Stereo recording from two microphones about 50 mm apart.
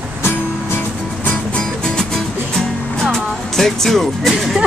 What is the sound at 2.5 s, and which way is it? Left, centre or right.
Music, centre.